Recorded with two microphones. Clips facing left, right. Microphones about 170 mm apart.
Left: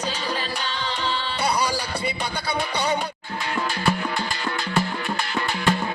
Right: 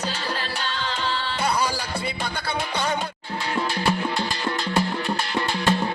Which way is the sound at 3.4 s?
25° right (ahead or behind).